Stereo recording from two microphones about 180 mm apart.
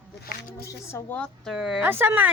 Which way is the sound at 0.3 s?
65° left (ahead or behind).